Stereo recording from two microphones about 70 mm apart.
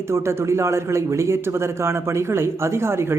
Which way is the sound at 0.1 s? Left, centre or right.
Right.